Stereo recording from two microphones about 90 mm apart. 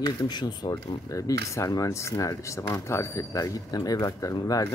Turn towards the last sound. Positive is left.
turn(degrees=40)  # may be behind; listen again after turning